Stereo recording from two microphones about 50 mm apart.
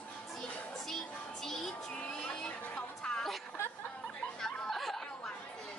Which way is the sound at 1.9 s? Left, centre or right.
Left.